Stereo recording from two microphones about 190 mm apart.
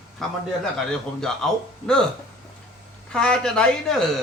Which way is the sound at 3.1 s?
5° left (ahead or behind).